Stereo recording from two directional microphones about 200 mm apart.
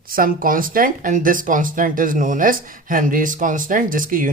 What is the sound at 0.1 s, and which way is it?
Speech, 45° right (ahead or behind).